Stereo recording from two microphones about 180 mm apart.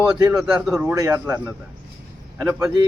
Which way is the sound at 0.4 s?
5° right (ahead or behind).